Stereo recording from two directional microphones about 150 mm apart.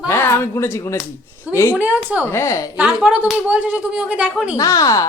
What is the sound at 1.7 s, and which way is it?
Speech, 10° right (ahead or behind).